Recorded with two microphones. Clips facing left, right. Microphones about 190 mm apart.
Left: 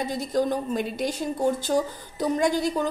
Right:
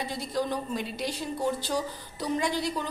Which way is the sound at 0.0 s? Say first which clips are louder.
Left 6 dB; 45° left (ahead or behind).